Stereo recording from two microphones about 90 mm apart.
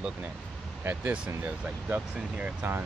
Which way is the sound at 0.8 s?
15° right (ahead or behind).